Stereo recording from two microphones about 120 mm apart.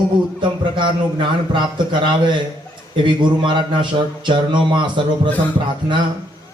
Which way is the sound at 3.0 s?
40° right (ahead or behind).